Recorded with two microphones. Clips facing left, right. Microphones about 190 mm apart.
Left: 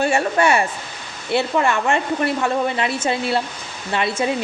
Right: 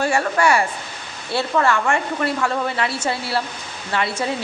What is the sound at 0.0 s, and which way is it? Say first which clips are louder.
Speech: left 1 dB; 25° left (ahead or behind).